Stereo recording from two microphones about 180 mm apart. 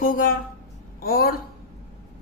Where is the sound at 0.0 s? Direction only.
50° left (ahead or behind).